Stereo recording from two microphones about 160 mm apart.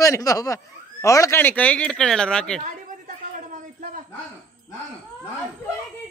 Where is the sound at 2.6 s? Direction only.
55° right (ahead or behind).